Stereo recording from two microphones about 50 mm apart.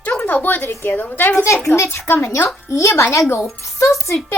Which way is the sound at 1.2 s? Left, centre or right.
Left.